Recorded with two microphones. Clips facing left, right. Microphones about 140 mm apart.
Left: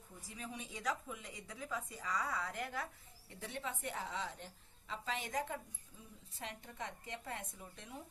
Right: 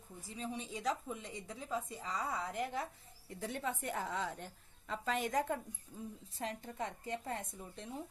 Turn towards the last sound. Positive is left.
turn(degrees=-30)  # may be behind; listen again after turning